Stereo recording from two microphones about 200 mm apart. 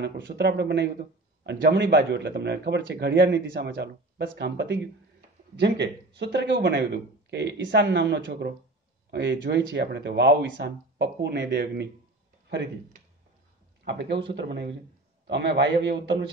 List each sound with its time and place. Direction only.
0.0 s a man's voice: 60° right (ahead or behind)
13.8 s a man's voice: 60° right (ahead or behind)